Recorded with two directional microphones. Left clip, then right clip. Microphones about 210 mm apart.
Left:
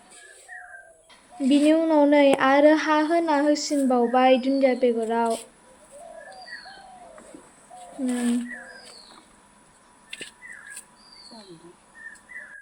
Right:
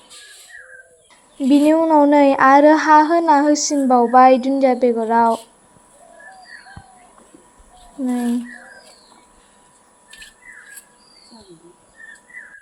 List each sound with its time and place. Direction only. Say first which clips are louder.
1.4 s speech: right 6 dB; 20° right (ahead or behind)